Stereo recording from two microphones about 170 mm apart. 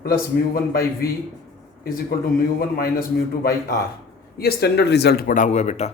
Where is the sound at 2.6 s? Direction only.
60° left (ahead or behind).